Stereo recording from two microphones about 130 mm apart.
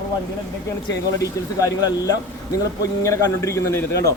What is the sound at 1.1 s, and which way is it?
Speech, 25° left (ahead or behind).